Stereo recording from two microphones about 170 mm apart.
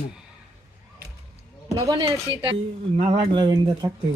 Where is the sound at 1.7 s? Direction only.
20° right (ahead or behind).